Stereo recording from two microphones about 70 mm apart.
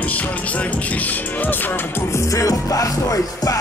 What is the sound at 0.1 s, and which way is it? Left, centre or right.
Music, left.